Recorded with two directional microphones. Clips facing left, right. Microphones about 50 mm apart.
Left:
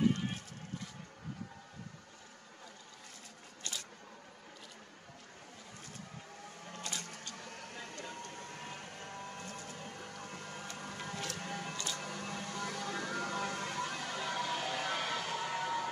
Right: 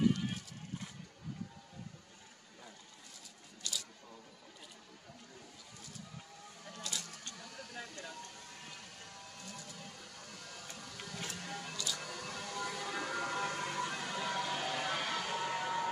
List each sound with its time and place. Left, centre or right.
3.6 s camera: left
6.6 s vehicle: left
11.3 s music: left
12.5 s music: centre